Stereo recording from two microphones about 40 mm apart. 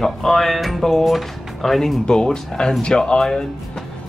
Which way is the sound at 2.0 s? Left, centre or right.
Centre.